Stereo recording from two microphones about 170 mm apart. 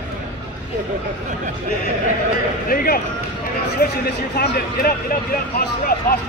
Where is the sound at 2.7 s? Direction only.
60° left (ahead or behind).